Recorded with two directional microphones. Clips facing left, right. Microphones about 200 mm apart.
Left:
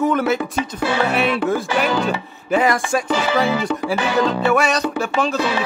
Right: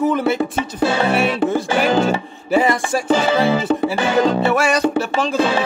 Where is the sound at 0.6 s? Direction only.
30° right (ahead or behind).